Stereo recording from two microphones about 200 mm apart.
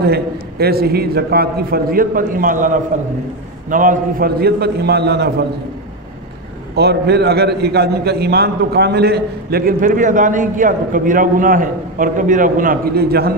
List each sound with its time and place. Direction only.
0.0 s a man's voice: 50° right (ahead or behind)
6.7 s a man's voice: 55° right (ahead or behind)